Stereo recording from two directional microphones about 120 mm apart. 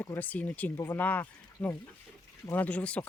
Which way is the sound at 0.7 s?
30° left (ahead or behind).